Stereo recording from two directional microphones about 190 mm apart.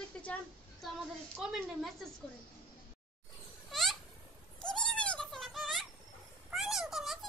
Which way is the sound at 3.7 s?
Centre (ahead or behind).